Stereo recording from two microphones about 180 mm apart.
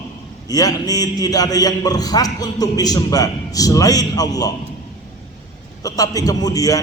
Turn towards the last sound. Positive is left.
turn(degrees=20)  # may be behind; listen again after turning